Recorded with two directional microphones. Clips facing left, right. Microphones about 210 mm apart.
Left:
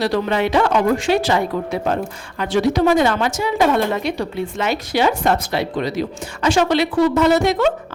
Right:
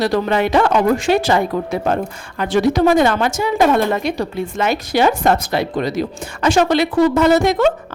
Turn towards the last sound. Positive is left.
turn(degrees=-50)  # may be behind; listen again after turning